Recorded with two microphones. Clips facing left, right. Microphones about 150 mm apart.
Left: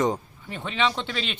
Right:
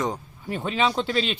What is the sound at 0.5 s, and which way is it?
Speech, 40° right (ahead or behind).